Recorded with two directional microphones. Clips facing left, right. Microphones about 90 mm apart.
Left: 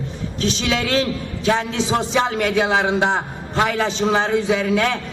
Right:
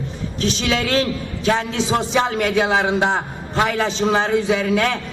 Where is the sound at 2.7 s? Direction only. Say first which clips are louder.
Even; 20° left (ahead or behind).